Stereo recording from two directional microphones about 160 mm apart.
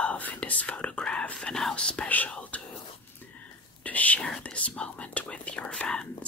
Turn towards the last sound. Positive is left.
turn(degrees=5)  # may be behind; listen again after turning